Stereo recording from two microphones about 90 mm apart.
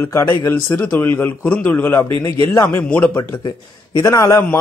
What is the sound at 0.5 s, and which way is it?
A man's voice, 20° left (ahead or behind).